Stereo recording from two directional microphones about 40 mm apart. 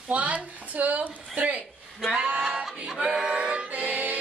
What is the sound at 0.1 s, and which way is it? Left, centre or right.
A woman's voice, right.